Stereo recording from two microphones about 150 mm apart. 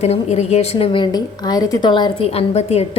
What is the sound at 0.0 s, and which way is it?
Speech, 45° left (ahead or behind).